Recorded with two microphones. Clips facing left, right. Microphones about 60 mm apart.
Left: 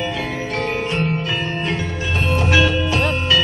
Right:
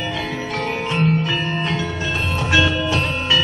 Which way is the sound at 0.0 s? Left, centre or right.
Left.